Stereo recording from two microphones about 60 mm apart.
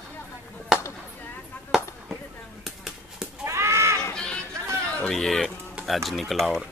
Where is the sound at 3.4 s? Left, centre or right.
Right.